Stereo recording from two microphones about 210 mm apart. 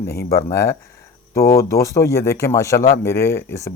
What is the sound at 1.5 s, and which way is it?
Speech, 15° left (ahead or behind).